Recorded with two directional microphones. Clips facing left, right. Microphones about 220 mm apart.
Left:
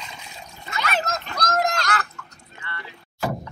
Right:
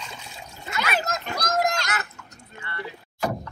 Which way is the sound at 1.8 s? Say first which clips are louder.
Left 4 dB; 20° right (ahead or behind).